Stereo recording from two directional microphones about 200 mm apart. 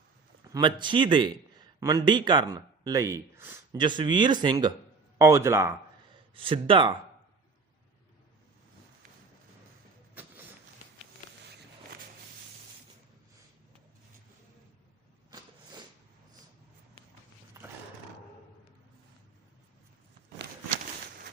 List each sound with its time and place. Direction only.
0.5 s a man's voice: 25° right (ahead or behind)
3.8 s speech: 25° right (ahead or behind)
6.3 s speech: 25° right (ahead or behind)
17.6 s dog: 15° right (ahead or behind)